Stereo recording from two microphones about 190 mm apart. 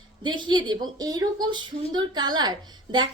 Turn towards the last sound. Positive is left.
turn(degrees=-25)  # may be behind; listen again after turning